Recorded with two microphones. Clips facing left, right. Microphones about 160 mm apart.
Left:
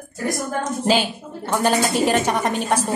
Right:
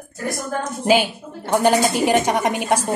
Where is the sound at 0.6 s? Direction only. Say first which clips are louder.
Right 3 dB; 10° right (ahead or behind).